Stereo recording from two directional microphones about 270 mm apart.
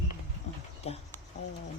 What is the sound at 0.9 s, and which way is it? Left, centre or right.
Speech, left.